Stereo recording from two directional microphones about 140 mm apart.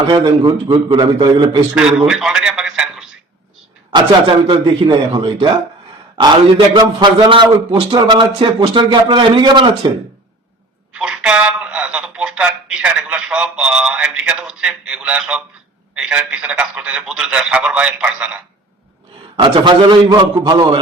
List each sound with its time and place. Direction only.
0.1 s a man's voice: 30° right (ahead or behind)
1.7 s a man's voice: 5° right (ahead or behind)
3.9 s a man's voice: 30° right (ahead or behind)
6.7 s a man's voice: 30° right (ahead or behind)
10.9 s a man's voice: 10° right (ahead or behind)
19.4 s a man's voice: 30° right (ahead or behind)